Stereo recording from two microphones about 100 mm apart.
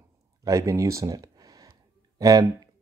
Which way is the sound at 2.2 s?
40° right (ahead or behind).